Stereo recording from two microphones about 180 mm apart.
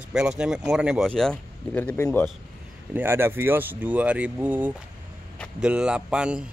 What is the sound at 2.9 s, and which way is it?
Speech, 10° right (ahead or behind).